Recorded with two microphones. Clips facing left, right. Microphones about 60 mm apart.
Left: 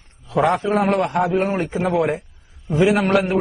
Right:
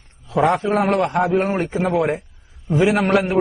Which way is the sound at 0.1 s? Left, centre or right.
Centre.